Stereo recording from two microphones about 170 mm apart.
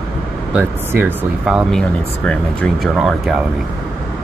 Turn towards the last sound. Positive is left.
turn(degrees=0)  # may be behind; listen again after turning